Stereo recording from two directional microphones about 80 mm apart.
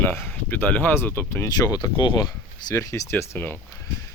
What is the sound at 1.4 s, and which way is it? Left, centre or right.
Speech, left.